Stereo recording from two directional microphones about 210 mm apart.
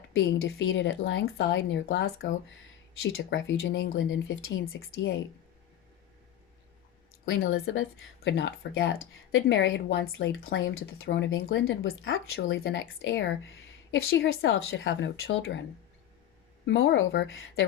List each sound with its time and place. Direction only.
0.2 s speech: 60° left (ahead or behind)
7.3 s speech: 60° left (ahead or behind)
12.4 s a woman's voice: 55° left (ahead or behind)
14.3 s speech: 70° left (ahead or behind)
16.6 s speech: 60° left (ahead or behind)